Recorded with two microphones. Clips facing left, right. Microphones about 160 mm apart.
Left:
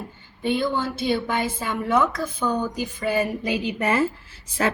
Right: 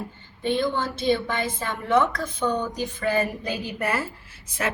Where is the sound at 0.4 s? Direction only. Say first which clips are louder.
Left 1 dB; 10° left (ahead or behind).